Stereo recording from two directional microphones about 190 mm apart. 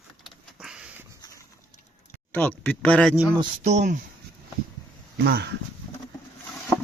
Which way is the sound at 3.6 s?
40° right (ahead or behind).